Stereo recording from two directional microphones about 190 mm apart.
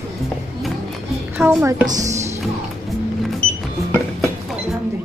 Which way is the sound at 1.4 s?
10° right (ahead or behind).